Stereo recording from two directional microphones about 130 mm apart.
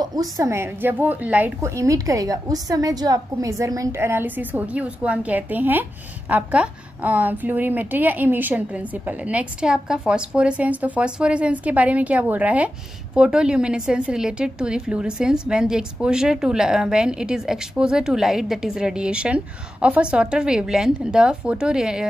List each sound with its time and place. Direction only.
0.0 s a woman's voice: 30° right (ahead or behind); by 1.7 s 15° right (ahead or behind)
1.8 s a woman's voice: 25° right (ahead or behind); by 22.0 s 5° right (ahead or behind)